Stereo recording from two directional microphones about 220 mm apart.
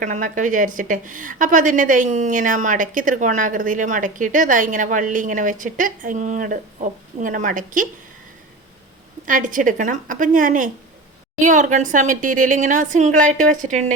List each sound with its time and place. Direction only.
0.0 s a woman's voice: 35° right (ahead or behind)
9.2 s a woman's voice: 35° right (ahead or behind)